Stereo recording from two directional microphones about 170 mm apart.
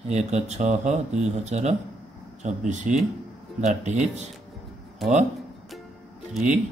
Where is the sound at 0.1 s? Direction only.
40° right (ahead or behind).